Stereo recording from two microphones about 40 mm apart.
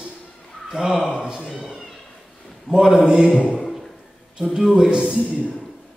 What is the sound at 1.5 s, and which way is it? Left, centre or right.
A man's voice, centre.